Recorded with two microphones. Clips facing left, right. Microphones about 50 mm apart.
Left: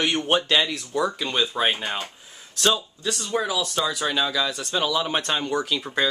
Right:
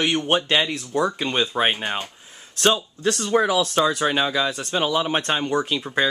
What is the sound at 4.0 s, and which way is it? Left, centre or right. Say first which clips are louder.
Speech: right 3 dB; right.